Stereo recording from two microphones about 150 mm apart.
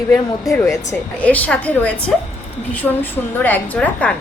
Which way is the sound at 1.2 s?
10° left (ahead or behind).